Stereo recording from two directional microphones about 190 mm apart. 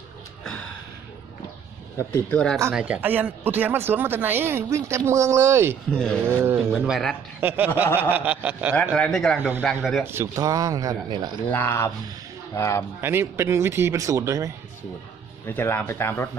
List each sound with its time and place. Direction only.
2.0 s speech: 15° left (ahead or behind)
2.3 s speech: 5° left (ahead or behind)
2.7 s speech: 5° right (ahead or behind)
8.9 s speech: 5° left (ahead or behind)
10.0 s speech: 15° right (ahead or behind)
11.5 s speech: 10° left (ahead or behind)
13.0 s speech: 10° right (ahead or behind)
15.4 s speech: 10° left (ahead or behind)